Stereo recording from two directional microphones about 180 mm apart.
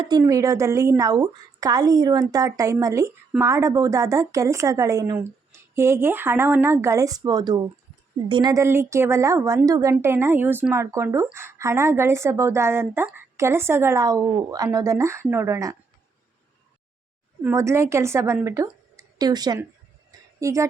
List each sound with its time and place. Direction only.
0.0 s speech: 20° right (ahead or behind)
17.4 s speech: 15° right (ahead or behind)
20.1 s a sound: 15° right (ahead or behind)